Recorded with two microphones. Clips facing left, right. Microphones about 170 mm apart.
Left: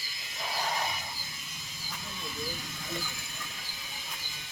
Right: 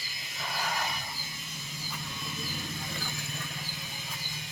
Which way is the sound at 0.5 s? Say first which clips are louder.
Left 1 dB; 25° left (ahead or behind).